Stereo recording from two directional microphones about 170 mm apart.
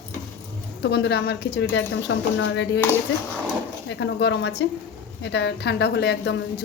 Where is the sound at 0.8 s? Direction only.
85° left.